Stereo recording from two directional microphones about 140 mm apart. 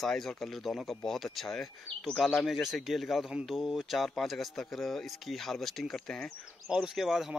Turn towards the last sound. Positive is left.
turn(degrees=0)  # may be behind; listen again after turning